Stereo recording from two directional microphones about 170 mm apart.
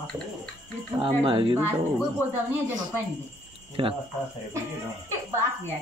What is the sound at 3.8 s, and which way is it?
Cricket, 30° right (ahead or behind).